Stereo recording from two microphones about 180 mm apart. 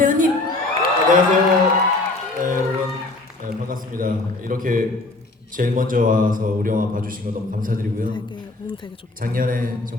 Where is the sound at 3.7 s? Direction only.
50° right (ahead or behind).